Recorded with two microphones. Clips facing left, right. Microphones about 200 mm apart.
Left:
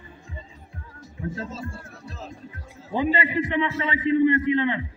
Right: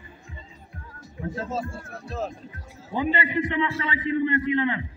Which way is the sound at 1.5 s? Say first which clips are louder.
Right 5 dB; 55° right (ahead or behind).